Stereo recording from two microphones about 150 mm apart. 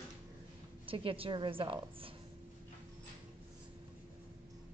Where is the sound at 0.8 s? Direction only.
35° right (ahead or behind).